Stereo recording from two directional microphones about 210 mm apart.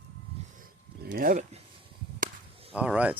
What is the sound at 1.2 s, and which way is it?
Speech, 40° right (ahead or behind).